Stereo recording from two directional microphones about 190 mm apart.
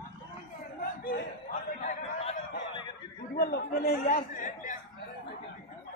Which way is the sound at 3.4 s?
55° left (ahead or behind).